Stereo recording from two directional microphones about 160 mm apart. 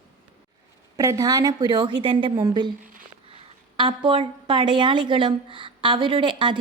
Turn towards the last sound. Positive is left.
turn(degrees=-30)  # may be behind; listen again after turning